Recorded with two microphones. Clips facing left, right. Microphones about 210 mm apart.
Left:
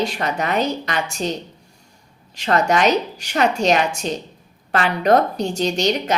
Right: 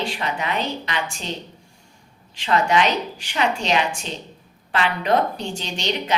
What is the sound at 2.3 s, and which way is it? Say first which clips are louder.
A woman's voice: left 2 dB; 40° left (ahead or behind).